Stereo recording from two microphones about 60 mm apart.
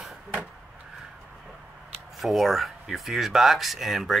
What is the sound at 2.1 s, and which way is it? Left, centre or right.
Speech, centre.